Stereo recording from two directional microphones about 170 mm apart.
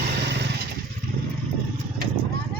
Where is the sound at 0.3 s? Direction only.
90° right.